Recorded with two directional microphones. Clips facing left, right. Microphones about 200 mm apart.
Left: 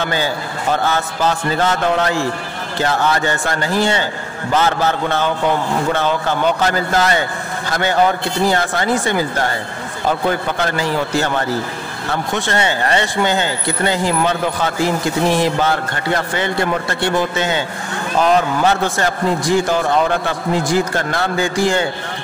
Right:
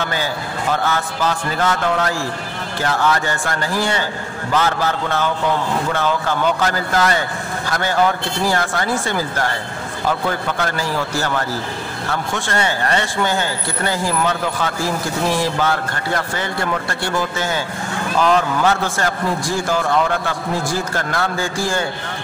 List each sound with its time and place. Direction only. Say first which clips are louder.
0.8 s a man's voice: left 2 dB; 25° left (ahead or behind)
8.5 s a man's voice: left 2 dB; 20° left (ahead or behind)